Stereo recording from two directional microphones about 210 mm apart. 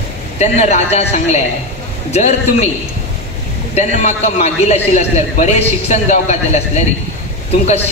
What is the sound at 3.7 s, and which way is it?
A man's voice, 30° left (ahead or behind).